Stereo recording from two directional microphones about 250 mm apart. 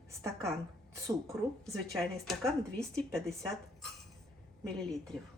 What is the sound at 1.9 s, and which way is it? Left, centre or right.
Speech, centre.